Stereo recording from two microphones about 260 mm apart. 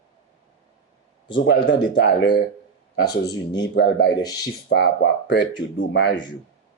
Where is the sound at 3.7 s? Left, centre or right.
Left.